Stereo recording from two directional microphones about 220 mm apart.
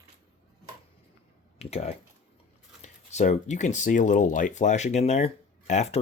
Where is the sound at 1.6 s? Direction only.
30° left (ahead or behind).